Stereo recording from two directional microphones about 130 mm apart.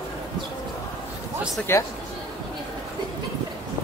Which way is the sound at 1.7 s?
20° left (ahead or behind).